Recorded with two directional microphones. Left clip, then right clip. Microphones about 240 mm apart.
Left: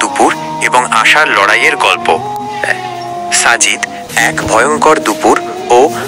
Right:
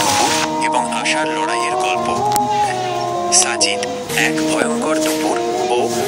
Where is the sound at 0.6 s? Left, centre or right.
Left.